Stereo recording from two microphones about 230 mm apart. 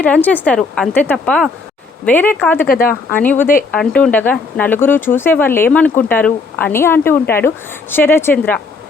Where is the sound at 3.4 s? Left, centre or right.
Left.